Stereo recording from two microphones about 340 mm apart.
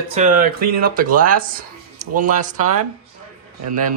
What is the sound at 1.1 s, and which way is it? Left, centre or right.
Speech, right.